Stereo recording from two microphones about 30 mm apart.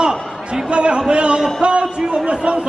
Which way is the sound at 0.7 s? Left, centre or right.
Right.